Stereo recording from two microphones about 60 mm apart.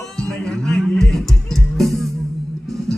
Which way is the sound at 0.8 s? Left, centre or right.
Centre.